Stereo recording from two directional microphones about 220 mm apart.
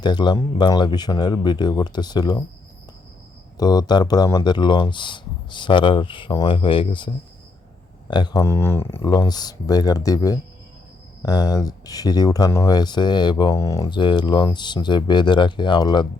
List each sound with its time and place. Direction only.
0.0 s speech: 20° left (ahead or behind)
3.6 s speech: 15° left (ahead or behind)